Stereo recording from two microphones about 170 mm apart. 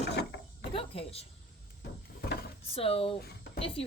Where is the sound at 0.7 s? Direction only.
35° left (ahead or behind).